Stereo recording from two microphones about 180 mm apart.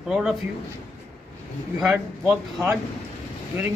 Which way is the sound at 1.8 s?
Centre (ahead or behind).